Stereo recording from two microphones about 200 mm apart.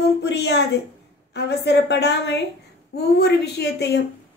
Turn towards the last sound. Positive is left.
turn(degrees=55)  # may be behind; listen again after turning